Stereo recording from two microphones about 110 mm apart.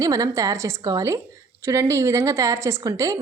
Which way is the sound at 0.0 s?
35° right (ahead or behind).